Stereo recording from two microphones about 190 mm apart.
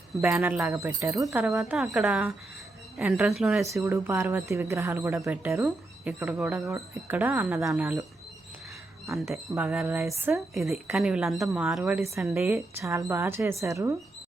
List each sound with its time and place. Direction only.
0.1 s speech: 10° right (ahead or behind)
1.5 s speech: 5° right (ahead or behind)
3.8 s speech: 10° right (ahead or behind)
9.0 s speech: centre (ahead or behind)
10.3 s speech: centre (ahead or behind)